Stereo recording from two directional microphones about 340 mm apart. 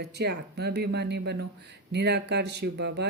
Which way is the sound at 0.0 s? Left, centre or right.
Right.